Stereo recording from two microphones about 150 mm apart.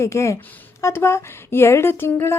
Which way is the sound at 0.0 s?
20° left (ahead or behind).